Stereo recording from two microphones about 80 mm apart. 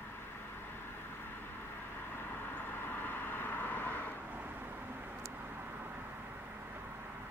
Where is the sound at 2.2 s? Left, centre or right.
Left.